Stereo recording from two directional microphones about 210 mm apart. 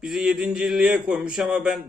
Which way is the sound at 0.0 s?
Centre (ahead or behind).